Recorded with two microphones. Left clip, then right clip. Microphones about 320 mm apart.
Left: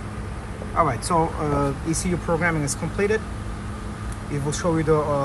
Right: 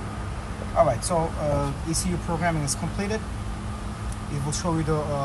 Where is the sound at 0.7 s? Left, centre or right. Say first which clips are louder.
Left 1 dB; centre.